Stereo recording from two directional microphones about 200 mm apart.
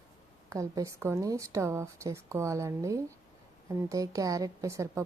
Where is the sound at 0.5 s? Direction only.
15° right (ahead or behind).